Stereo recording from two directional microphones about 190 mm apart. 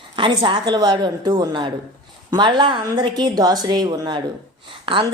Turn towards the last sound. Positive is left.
turn(degrees=-25)  # may be behind; listen again after turning